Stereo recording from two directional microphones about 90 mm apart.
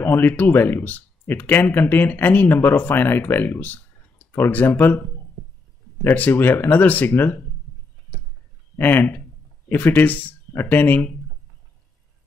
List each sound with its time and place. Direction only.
0.0 s speech: 25° left (ahead or behind)
6.0 s speech: 20° left (ahead or behind)
8.7 s speech: 25° left (ahead or behind)